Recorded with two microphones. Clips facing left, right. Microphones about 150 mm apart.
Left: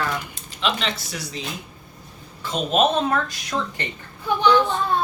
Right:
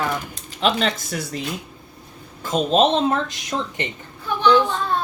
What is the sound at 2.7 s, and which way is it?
Speech, 25° right (ahead or behind).